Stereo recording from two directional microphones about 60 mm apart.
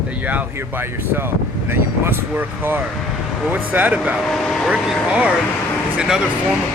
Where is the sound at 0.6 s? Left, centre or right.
Right.